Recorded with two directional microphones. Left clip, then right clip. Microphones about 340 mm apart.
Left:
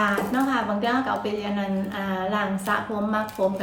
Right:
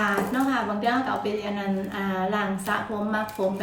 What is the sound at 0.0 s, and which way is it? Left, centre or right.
A woman's voice, centre.